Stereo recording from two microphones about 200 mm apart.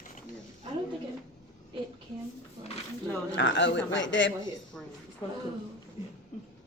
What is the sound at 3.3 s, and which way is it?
Speech, 65° left (ahead or behind).